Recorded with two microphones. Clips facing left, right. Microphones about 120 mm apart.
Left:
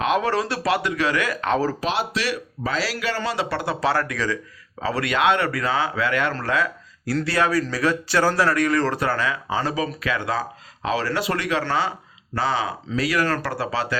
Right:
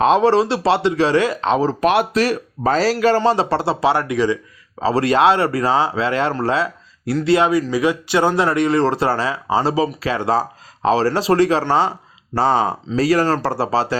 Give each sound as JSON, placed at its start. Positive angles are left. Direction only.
{"t": 0.0, "sound": "speech", "side_deg": -30}
{"t": 1.8, "sound": "speech", "side_deg": -55}
{"t": 2.2, "sound": "speech", "side_deg": -45}